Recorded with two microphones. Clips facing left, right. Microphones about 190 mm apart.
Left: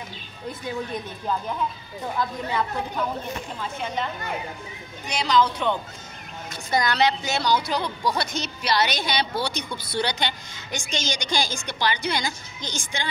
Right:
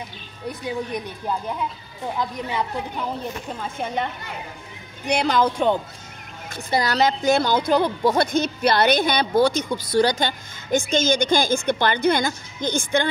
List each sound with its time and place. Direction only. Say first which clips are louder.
0.5 s a woman's voice: right 3 dB; 15° right (ahead or behind)
3.6 s a woman's voice: right 3 dB; 55° right (ahead or behind)
6.7 s a woman's voice: right 2 dB; 35° right (ahead or behind); by 13.1 s 55° right (ahead or behind)